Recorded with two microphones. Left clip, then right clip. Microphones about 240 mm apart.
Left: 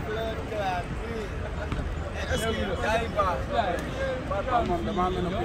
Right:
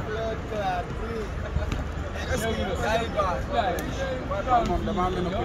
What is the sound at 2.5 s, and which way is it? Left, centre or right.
Speech, centre.